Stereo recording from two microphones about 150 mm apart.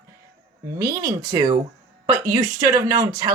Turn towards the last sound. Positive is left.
turn(degrees=-25)  # may be behind; listen again after turning